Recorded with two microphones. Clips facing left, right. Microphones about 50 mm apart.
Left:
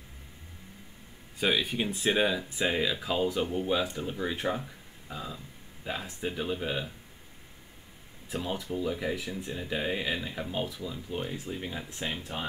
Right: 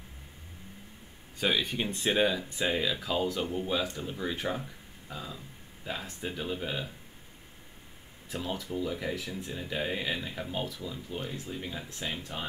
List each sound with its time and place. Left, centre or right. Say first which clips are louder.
1.4 s speech: left 1 dB; centre
8.3 s speech: left 2 dB; centre
11.1 s speech: left 3 dB; centre